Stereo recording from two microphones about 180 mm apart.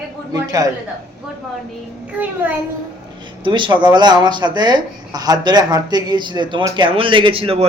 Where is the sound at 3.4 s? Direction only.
25° right (ahead or behind).